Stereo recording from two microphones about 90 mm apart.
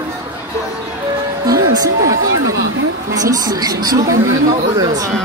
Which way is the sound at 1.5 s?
40° right (ahead or behind).